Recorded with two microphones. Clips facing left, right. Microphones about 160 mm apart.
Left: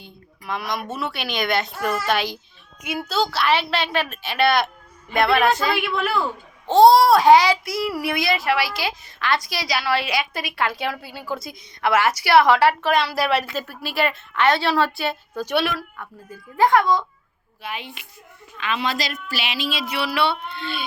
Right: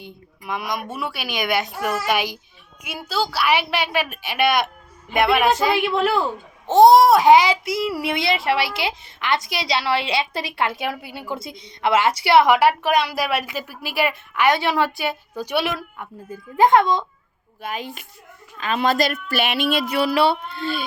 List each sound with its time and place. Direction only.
0.0 s a child's voice: 15° right (ahead or behind)
17.6 s speech: 40° right (ahead or behind)